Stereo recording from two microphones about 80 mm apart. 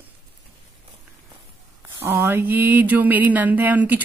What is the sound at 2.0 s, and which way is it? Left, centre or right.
Speech, right.